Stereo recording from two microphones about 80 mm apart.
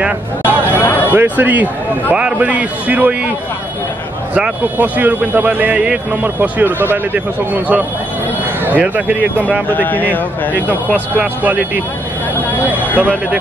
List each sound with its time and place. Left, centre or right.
0.0 s speech: right
0.7 s a sound: left
1.1 s a man's voice: right
4.7 s speech: right
9.7 s speech: left
10.5 s speech: right